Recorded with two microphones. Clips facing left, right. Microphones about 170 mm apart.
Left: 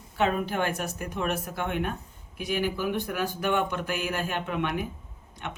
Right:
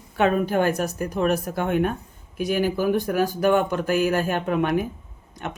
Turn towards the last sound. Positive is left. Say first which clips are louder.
# right 5 dB
turn(degrees=-45)  # may be behind; listen again after turning